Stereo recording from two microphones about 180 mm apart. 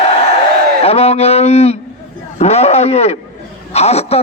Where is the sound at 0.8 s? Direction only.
35° left (ahead or behind).